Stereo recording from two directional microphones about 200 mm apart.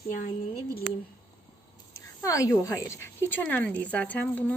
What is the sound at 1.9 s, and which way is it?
A woman's voice, 15° left (ahead or behind).